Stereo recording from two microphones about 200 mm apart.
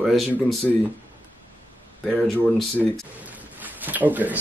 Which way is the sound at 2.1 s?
Centre (ahead or behind).